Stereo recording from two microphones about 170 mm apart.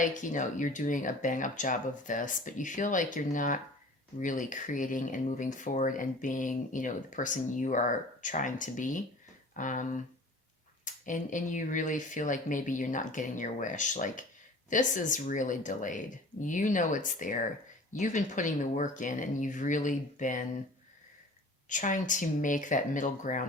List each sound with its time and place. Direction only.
0.0 s speech: 50° left (ahead or behind)
21.7 s speech: 50° left (ahead or behind)